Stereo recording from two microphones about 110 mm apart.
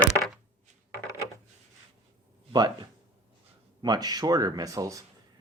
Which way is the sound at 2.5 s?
40° right (ahead or behind).